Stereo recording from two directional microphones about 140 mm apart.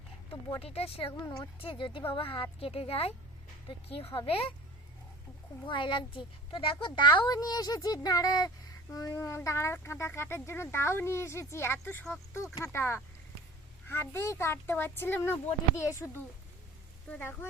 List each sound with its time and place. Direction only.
0.6 s a woman's voice: 45° left (ahead or behind)
5.6 s a woman's voice: 35° left (ahead or behind)
17.1 s speech: 10° left (ahead or behind)